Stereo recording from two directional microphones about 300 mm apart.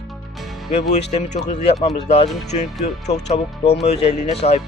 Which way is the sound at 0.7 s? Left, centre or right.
Left.